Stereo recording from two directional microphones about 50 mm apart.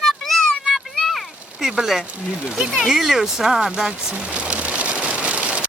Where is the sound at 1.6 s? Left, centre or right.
Centre.